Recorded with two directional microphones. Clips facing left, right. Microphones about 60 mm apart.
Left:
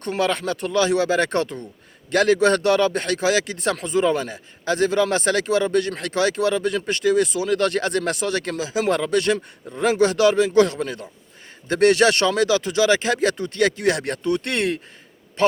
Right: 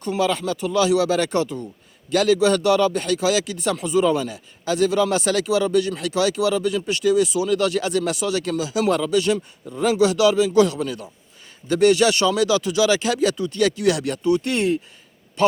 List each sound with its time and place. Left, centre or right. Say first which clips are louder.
0.0 s a man's voice: right 1 dB; left